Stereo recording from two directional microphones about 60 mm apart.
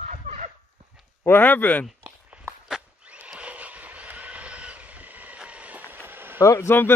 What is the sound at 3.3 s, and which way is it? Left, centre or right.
Train, right.